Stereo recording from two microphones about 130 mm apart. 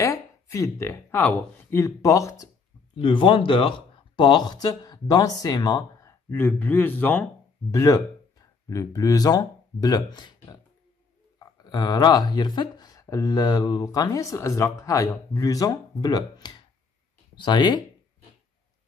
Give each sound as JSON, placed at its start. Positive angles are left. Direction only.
{"t": 0.0, "sound": "speech", "side_deg": 25}
{"t": 3.0, "sound": "speech", "side_deg": 40}
{"t": 7.7, "sound": "speech", "side_deg": 25}